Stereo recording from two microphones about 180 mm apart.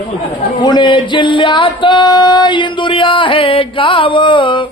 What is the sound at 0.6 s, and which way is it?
Mantra, 25° left (ahead or behind).